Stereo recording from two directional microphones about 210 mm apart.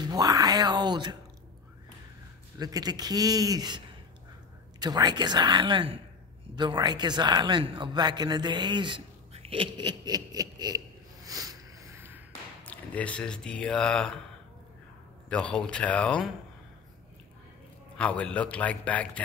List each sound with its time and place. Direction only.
0.0 s a sound: 20° right (ahead or behind)
2.6 s a man's voice: 20° right (ahead or behind)
11.2 s sniff: 15° right (ahead or behind)
12.6 s speech: 5° left (ahead or behind)
15.2 s speech: 5° left (ahead or behind)
17.9 s a man's voice: 5° left (ahead or behind)